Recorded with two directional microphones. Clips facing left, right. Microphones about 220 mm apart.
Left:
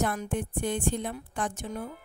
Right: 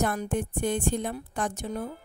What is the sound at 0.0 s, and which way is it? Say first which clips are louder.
A woman's voice: right 2 dB; 40° right (ahead or behind).